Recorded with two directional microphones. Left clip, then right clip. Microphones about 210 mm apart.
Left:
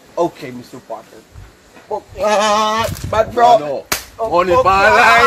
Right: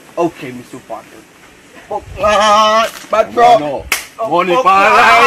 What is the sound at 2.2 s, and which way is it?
Fowl, 25° left (ahead or behind).